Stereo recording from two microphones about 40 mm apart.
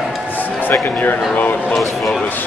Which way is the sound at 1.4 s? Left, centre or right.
Left.